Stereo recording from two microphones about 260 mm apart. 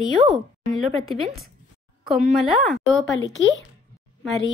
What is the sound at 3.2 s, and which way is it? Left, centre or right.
Speech, left.